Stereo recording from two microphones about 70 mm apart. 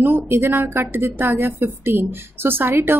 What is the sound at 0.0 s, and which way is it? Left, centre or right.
A woman's voice, right.